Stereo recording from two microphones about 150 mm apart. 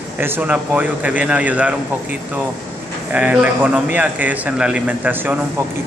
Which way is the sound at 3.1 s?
10° right (ahead or behind).